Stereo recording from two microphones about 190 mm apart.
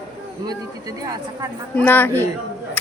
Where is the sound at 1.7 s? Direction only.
10° left (ahead or behind).